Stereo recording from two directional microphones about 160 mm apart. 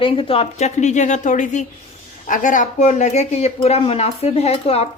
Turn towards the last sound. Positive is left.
turn(degrees=40)  # may be behind; listen again after turning